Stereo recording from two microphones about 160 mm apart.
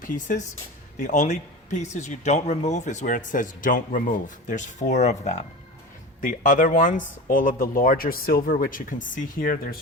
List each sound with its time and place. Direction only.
0.0 s speech: 50° left (ahead or behind)